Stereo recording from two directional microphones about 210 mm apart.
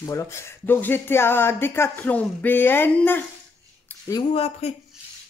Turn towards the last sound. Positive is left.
turn(degrees=30)  # may be behind; listen again after turning